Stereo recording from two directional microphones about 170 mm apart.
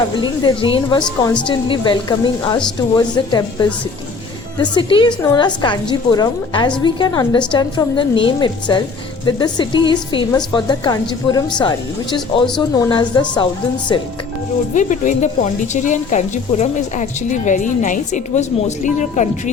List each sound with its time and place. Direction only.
0.2 s a woman's voice: 30° left (ahead or behind)
14.7 s a woman's voice: 50° left (ahead or behind)